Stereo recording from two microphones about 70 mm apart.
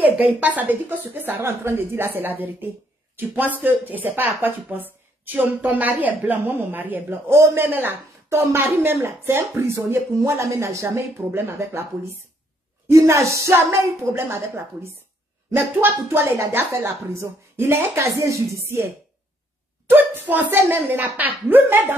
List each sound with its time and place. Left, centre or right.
0.2 s a woman's voice: right
1.4 s a woman's voice: right
7.6 s a woman's voice: right
8.4 s speech: right
19.9 s a woman's voice: right